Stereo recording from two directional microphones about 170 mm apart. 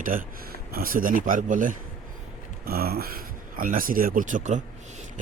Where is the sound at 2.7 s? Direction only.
60° right (ahead or behind).